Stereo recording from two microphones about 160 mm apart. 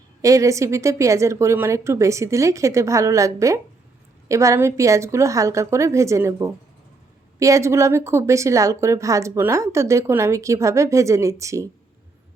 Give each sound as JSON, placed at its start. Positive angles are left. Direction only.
{"t": 0.2, "sound": "a woman's voice", "side_deg": -20}